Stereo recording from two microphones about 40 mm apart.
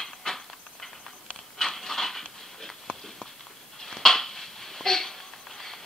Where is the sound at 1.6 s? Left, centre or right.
Centre.